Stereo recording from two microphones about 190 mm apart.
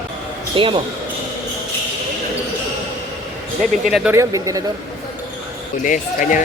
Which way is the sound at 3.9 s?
Centre (ahead or behind).